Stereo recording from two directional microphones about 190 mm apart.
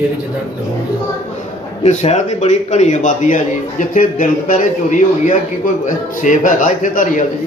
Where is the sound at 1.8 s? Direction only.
35° left (ahead or behind).